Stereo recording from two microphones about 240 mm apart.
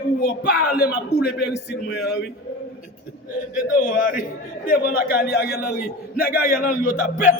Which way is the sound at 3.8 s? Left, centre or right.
Left.